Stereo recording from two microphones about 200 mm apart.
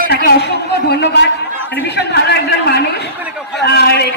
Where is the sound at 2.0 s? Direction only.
55° left (ahead or behind).